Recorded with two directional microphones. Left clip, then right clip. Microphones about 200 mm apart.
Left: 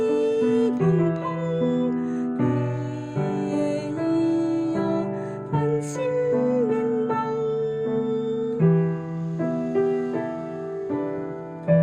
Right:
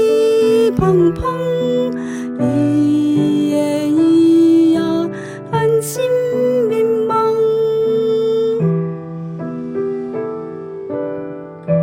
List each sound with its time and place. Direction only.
0.0 s music: 40° right (ahead or behind)